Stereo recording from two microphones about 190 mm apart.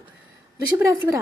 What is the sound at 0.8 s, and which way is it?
Speech, 15° right (ahead or behind).